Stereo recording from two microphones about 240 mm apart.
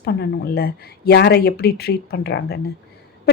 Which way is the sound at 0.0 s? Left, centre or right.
Left.